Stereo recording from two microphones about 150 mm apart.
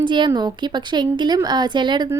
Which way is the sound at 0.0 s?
30° right (ahead or behind).